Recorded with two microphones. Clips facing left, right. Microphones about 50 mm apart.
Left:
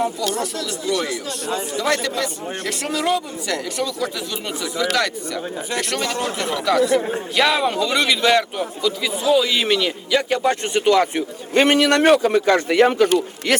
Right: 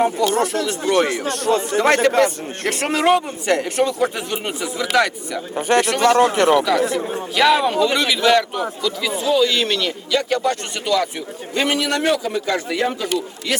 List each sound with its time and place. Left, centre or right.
0.0 s speech: right
5.5 s speech: right
6.0 s speech: right
6.9 s speech: left
7.3 s a man's voice: centre; by 11.1 s left
11.5 s a man's voice: left